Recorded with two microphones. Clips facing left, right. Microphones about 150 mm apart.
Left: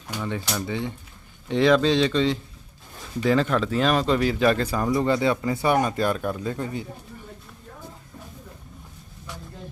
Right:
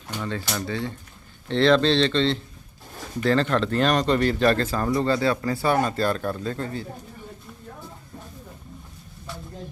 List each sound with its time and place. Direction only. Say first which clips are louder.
0.1 s speech: even; 15° left (ahead or behind)